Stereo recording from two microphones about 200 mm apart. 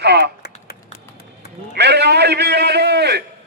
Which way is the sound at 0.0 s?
55° right (ahead or behind).